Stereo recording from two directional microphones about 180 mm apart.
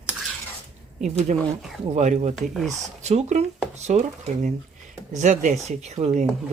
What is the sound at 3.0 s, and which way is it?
Speech, 35° right (ahead or behind).